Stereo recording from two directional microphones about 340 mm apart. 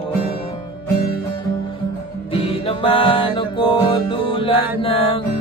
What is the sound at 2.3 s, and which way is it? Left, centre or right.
Music, centre.